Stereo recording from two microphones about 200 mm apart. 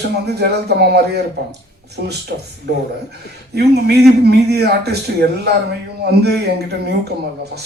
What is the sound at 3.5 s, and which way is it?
Speech, 55° right (ahead or behind).